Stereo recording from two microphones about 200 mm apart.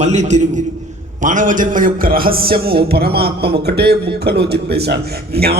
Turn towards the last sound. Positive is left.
turn(degrees=-50)  # may be behind; listen again after turning